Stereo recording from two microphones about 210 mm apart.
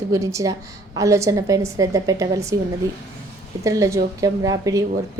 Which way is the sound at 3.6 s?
15° right (ahead or behind).